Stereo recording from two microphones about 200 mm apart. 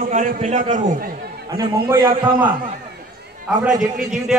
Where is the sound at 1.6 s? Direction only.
20° right (ahead or behind).